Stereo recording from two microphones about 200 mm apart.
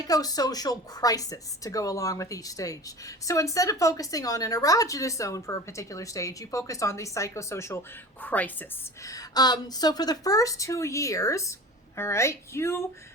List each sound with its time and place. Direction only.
0.1 s speech: 20° left (ahead or behind)